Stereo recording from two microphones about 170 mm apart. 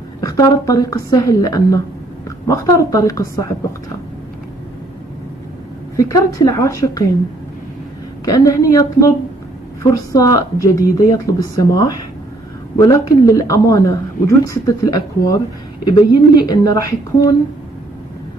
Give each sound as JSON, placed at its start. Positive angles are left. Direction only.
{"t": 0.2, "sound": "a man's voice", "side_deg": 20}
{"t": 5.9, "sound": "a man's voice", "side_deg": 20}
{"t": 8.3, "sound": "a man's voice", "side_deg": 20}
{"t": 10.1, "sound": "a man's voice", "side_deg": 20}